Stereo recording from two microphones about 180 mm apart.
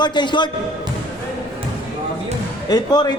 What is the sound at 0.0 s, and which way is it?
Speech, 25° left (ahead or behind).